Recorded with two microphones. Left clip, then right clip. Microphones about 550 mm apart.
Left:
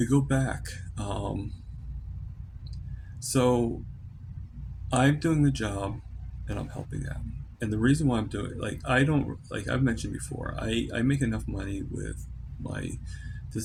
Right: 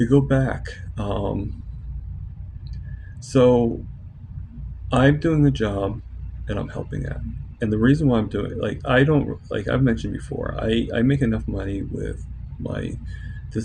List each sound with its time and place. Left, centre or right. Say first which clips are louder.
0.0 s speech: right 8 dB; left
3.2 s speech: right 9 dB; left
4.9 s speech: right 7 dB; left